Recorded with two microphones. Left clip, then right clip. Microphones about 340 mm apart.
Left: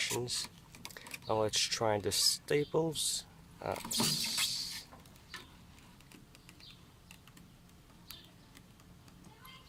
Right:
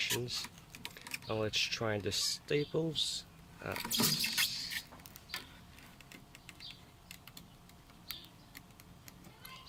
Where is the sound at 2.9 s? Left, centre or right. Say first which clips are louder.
Right 1 dB; left.